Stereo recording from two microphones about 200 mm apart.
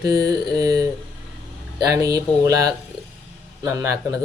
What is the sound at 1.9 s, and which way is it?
Speech, 15° right (ahead or behind).